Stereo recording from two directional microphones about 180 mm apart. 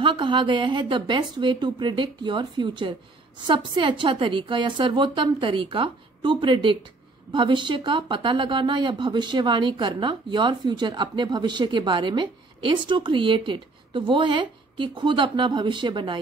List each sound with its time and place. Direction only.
0.0 s speech: 25° right (ahead or behind)